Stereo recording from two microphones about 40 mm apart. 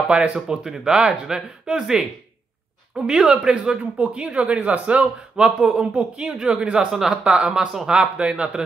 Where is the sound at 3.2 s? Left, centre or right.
Centre.